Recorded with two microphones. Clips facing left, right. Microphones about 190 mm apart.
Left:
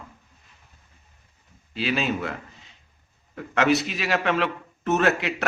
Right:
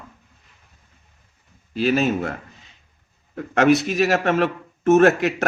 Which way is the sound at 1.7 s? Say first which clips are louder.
Right 6 dB; 45° right (ahead or behind).